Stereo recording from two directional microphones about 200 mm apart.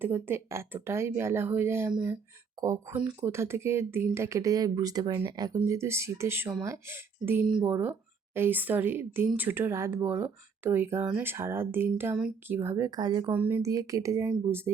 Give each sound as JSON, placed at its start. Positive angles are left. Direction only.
{"t": 0.0, "sound": "speech", "side_deg": -10}
{"t": 13.3, "sound": "speech", "side_deg": -10}